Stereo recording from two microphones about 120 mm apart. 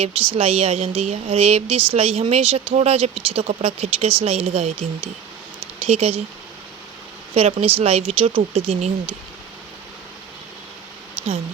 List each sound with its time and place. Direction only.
0.0 s speech: 55° right (ahead or behind)
7.6 s speech: 55° right (ahead or behind)